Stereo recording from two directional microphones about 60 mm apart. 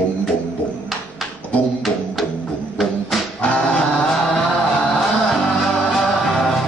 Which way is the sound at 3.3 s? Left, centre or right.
Left.